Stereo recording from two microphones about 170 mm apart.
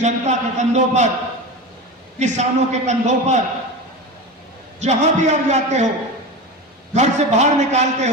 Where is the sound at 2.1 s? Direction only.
45° right (ahead or behind).